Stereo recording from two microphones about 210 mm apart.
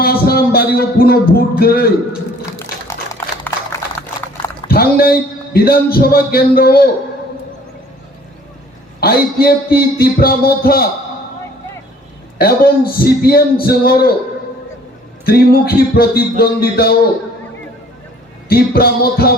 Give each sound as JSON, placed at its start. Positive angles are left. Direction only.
{"t": 0.0, "sound": "music", "side_deg": 45}
{"t": 2.8, "sound": "a sound", "side_deg": 15}
{"t": 4.7, "sound": "a man's voice", "side_deg": 45}
{"t": 9.0, "sound": "a man's voice", "side_deg": 45}
{"t": 12.4, "sound": "a man's voice", "side_deg": 45}
{"t": 15.2, "sound": "a man's voice", "side_deg": 45}
{"t": 18.4, "sound": "a man's voice", "side_deg": 45}